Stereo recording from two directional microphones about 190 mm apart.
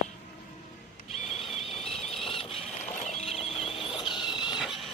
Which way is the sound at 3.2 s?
30° left (ahead or behind).